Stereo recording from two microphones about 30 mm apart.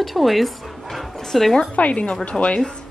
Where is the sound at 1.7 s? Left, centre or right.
Left.